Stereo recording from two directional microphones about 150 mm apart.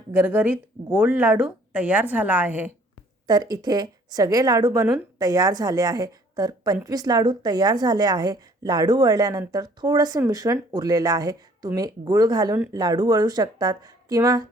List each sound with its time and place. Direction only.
0.1 s speech: 15° right (ahead or behind)
3.2 s a woman's voice: 25° right (ahead or behind)